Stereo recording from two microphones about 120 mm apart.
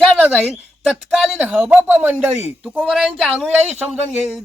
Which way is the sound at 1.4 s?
10° right (ahead or behind).